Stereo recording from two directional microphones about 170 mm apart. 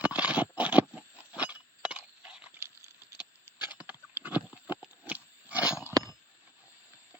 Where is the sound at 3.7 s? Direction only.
10° right (ahead or behind).